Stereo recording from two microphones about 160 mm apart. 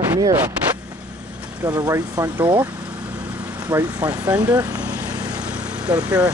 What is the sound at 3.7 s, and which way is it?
Speech, 10° right (ahead or behind).